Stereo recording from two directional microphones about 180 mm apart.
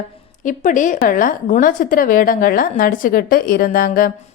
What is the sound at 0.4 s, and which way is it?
A woman's voice, 45° left (ahead or behind).